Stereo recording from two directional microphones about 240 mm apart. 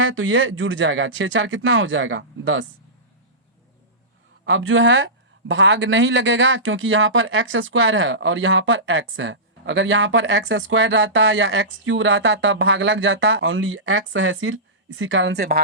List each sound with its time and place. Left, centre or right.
0.1 s speech: right
4.4 s speech: right